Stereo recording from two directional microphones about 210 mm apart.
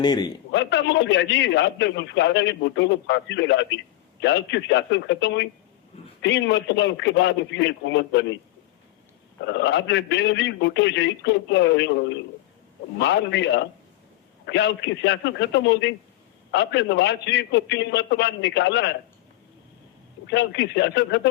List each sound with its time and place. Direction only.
0.0 s a man's voice: 20° left (ahead or behind)
0.5 s a man's voice: 55° left (ahead or behind)
9.5 s a man's voice: 55° left (ahead or behind)
20.2 s a man's voice: 55° left (ahead or behind)